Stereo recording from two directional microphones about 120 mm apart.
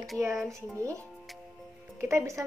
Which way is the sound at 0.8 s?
25° right (ahead or behind).